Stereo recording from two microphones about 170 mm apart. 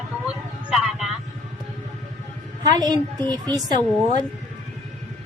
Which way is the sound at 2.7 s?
25° right (ahead or behind).